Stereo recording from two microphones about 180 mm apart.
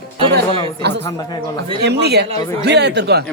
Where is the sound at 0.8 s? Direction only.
70° right (ahead or behind).